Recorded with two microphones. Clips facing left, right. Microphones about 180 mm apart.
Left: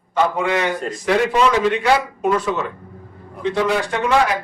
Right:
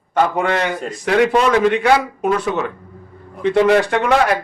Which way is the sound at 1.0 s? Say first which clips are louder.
Right 2 dB; 60° right (ahead or behind).